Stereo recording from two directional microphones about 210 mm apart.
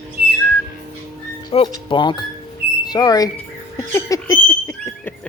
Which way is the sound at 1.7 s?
20° left (ahead or behind).